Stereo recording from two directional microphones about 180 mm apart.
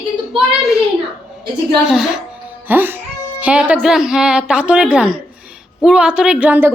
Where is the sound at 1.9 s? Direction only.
5° right (ahead or behind).